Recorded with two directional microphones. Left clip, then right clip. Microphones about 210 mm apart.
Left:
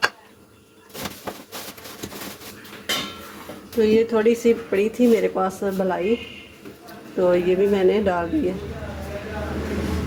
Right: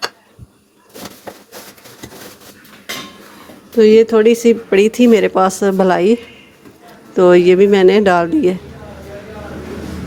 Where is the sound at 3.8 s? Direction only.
55° right (ahead or behind).